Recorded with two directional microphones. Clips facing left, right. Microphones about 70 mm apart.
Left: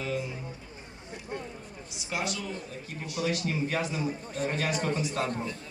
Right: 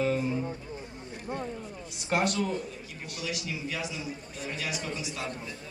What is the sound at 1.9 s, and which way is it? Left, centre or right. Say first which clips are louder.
Speech: right 5 dB; right.